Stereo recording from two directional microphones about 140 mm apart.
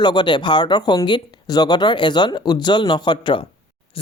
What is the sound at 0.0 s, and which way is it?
A man's voice, 30° left (ahead or behind).